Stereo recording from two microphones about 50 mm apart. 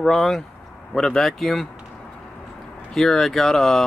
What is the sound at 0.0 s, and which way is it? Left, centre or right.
Speech, centre.